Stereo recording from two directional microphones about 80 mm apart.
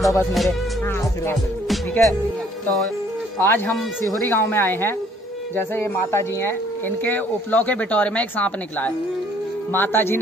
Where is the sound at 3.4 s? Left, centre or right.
Left.